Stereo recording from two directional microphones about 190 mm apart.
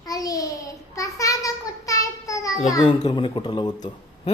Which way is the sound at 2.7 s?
20° left (ahead or behind).